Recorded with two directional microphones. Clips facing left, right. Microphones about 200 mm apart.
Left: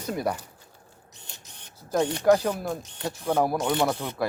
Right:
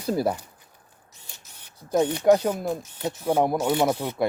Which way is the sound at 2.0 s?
15° right (ahead or behind).